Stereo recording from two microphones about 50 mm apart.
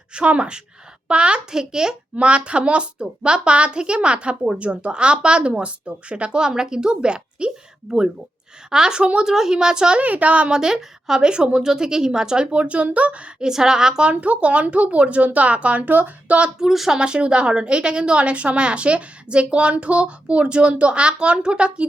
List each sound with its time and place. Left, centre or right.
0.1 s a woman's voice: right
8.7 s speech: centre
10.0 s speech: right
13.5 s speech: centre
14.1 s a woman's voice: right
16.6 s speech: centre
17.0 s a woman's voice: right